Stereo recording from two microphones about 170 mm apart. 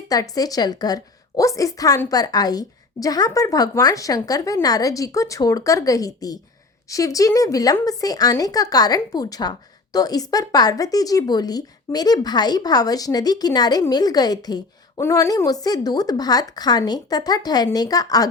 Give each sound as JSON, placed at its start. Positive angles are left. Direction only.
{"t": 0.1, "sound": "speech", "side_deg": 20}